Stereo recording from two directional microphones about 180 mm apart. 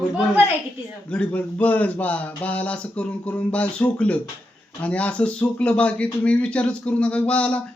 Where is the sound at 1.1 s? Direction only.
5° left (ahead or behind).